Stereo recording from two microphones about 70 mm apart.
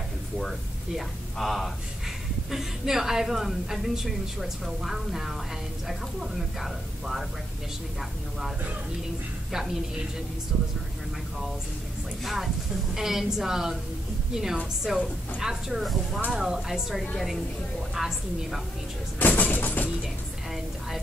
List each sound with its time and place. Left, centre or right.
0.4 s a woman's voice: centre
12.9 s a woman's voice: centre
19.1 s music: left